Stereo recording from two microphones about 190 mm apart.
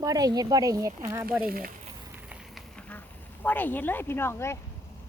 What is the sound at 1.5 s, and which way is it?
Speech, 50° right (ahead or behind).